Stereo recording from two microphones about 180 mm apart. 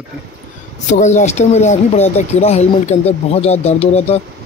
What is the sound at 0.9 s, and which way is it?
Speech, 40° left (ahead or behind).